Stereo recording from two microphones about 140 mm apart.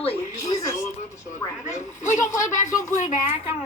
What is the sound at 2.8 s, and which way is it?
Speech, 65° left (ahead or behind).